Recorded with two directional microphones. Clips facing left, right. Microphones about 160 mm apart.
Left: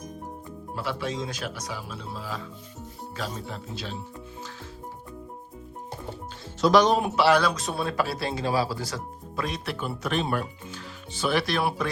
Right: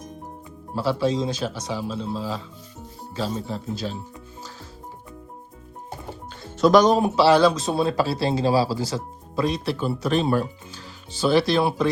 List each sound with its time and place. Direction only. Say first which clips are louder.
0.8 s speech: right 8 dB; 30° right (ahead or behind)
6.6 s speech: right 4 dB; 45° right (ahead or behind); by 11.9 s 30° right (ahead or behind)